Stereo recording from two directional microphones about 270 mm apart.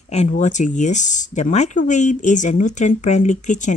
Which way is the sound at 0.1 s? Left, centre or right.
Left.